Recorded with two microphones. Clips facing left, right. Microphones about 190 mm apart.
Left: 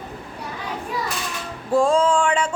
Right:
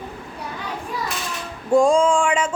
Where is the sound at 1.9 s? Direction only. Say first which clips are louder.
Right 1 dB; 10° right (ahead or behind).